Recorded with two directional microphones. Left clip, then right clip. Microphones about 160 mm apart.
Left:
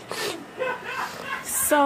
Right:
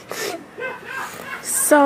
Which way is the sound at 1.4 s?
30° right (ahead or behind).